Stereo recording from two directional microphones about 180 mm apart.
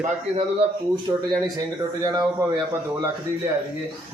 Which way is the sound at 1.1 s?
15° right (ahead or behind).